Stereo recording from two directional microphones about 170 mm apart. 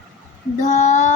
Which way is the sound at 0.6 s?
45° left (ahead or behind).